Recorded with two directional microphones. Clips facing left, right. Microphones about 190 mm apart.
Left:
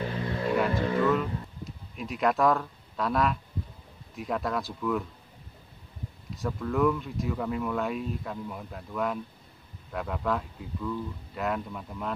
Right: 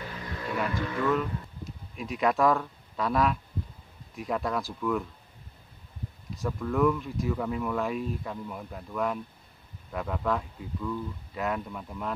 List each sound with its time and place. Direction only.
0.4 s music: 30° left (ahead or behind)
1.1 s speech: centre (ahead or behind)
6.3 s speech: centre (ahead or behind)